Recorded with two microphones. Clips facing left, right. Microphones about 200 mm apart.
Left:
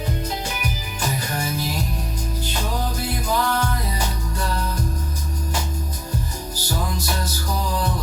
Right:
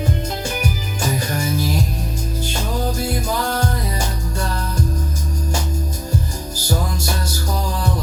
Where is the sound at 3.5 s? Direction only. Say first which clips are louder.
Right 2 dB; 45° right (ahead or behind).